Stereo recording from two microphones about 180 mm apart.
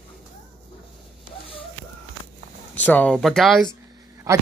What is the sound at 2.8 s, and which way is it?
Speech, 10° left (ahead or behind).